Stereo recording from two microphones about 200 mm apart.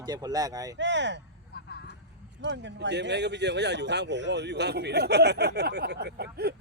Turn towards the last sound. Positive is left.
turn(degrees=-55)  # may be behind; listen again after turning